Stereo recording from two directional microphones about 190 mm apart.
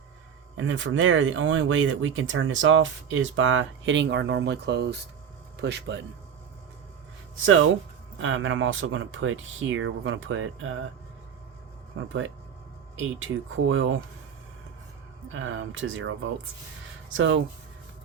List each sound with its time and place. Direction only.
0.5 s speech: 90° right; by 6.1 s 65° right (ahead or behind)
7.3 s speech: 90° right
13.0 s speech: 90° right
15.3 s speech: 90° right